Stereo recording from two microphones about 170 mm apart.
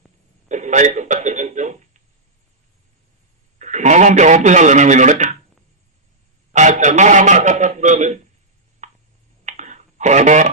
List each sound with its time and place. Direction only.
0.4 s telephone: 45° right (ahead or behind)
3.6 s speech: 45° right (ahead or behind)
6.5 s a sound: 45° right (ahead or behind)
9.4 s clicking: 45° right (ahead or behind)